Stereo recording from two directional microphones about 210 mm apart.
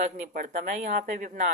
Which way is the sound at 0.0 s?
35° right (ahead or behind).